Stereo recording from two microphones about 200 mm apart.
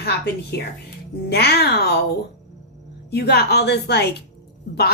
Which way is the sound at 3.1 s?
55° left (ahead or behind).